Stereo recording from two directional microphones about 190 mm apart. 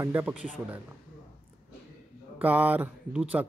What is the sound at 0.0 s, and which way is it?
Speech, 10° right (ahead or behind).